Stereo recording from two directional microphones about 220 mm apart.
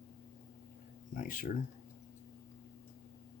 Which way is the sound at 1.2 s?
40° left (ahead or behind).